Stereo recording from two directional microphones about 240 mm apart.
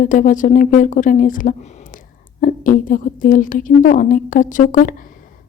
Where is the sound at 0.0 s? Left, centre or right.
Left.